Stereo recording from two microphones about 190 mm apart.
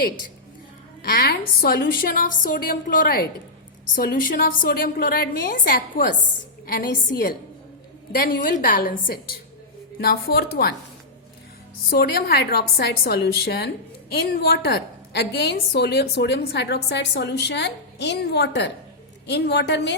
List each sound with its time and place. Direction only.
1.0 s a woman's voice: 55° left (ahead or behind)
11.9 s a woman's voice: 55° left (ahead or behind)